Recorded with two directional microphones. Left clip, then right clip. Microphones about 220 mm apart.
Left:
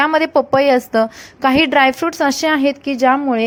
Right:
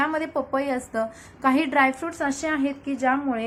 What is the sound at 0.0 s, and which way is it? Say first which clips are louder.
A woman's voice: left 11 dB; 35° left (ahead or behind).